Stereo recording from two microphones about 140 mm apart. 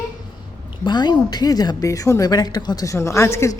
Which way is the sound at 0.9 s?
30° left (ahead or behind).